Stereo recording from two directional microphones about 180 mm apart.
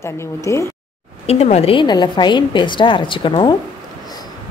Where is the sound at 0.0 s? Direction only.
15° left (ahead or behind).